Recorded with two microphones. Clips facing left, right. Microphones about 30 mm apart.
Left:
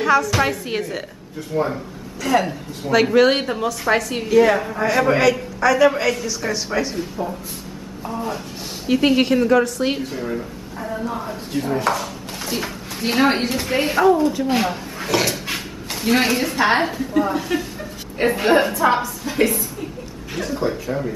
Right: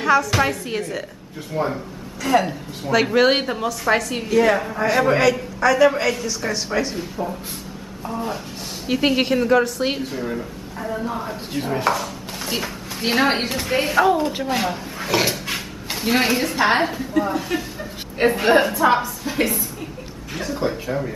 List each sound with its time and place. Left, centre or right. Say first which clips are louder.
0.0 s a woman's voice: left 1 dB; centre
1.5 s a woman's voice: left 2 dB; centre
8.8 s a woman's voice: left 3 dB; centre
13.5 s a woman's voice: left 1 dB; centre
14.1 s speech: left 3 dB; right
14.5 s a woman's voice: left 2 dB; centre
20.6 s speech: left 1 dB; right